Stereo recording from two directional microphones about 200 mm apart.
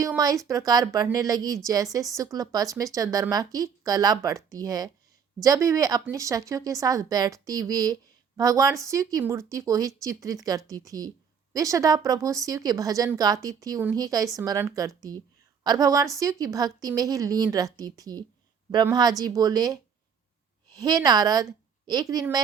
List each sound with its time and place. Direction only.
0.0 s a woman's voice: 15° right (ahead or behind)